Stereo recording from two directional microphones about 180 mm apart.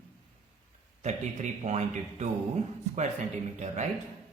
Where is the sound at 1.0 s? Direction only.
40° right (ahead or behind).